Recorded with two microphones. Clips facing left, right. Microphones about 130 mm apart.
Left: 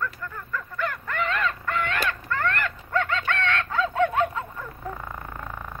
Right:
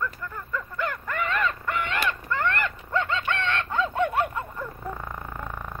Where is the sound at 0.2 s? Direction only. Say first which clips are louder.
Right 1 dB; 15° right (ahead or behind).